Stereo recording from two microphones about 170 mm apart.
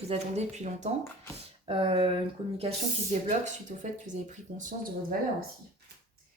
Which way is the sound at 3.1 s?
45° right (ahead or behind).